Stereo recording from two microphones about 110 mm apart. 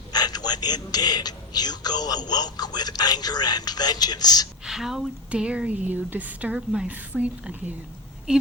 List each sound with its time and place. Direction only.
0.1 s a man's voice: 40° left (ahead or behind)
4.6 s speech: 5° right (ahead or behind)